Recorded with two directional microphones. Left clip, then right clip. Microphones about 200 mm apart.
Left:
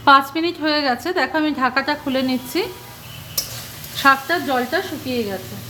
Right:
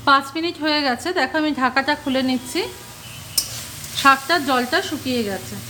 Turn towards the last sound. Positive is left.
turn(degrees=-20)  # may be behind; listen again after turning